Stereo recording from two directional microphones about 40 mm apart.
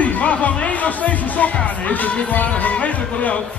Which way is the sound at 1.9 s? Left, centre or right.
Left.